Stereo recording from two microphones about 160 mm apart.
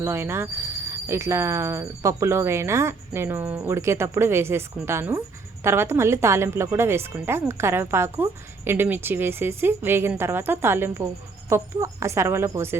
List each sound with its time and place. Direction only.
0.0 s a woman's voice: 15° right (ahead or behind)